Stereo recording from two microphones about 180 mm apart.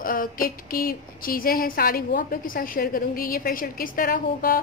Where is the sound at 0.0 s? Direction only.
50° left (ahead or behind).